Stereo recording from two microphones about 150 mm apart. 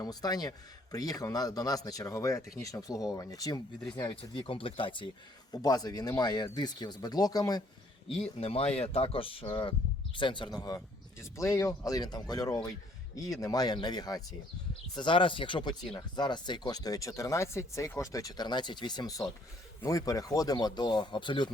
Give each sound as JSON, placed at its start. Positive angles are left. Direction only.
{"t": 0.0, "sound": "speech", "side_deg": 25}
{"t": 8.0, "sound": "speech", "side_deg": 40}